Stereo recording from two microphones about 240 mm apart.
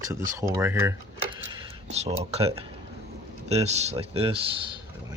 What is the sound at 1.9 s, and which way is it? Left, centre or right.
Speech, right.